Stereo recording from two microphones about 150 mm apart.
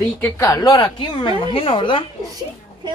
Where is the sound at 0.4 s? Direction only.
25° left (ahead or behind).